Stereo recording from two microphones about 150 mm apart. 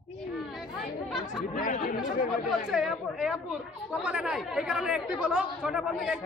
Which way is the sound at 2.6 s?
Centre (ahead or behind).